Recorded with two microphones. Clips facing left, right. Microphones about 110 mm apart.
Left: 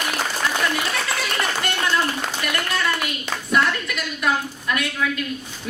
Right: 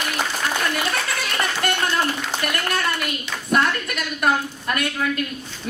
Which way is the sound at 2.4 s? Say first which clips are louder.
Even; 50° right (ahead or behind).